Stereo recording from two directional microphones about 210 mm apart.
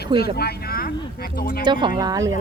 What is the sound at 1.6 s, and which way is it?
Speech, 20° right (ahead or behind).